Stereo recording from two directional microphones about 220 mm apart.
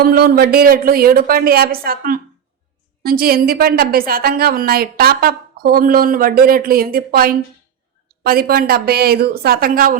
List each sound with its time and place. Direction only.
0.0 s a woman's voice: 45° right (ahead or behind)